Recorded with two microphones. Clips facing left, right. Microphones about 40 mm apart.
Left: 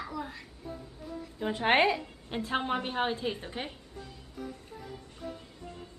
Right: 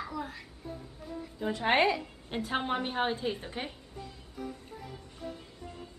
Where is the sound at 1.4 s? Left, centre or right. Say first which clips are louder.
Left 2 dB; left.